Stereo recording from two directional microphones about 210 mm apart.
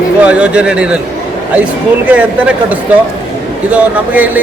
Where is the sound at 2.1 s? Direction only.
5° right (ahead or behind).